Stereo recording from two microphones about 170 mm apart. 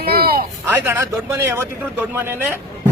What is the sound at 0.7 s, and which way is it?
A man's voice, 15° right (ahead or behind).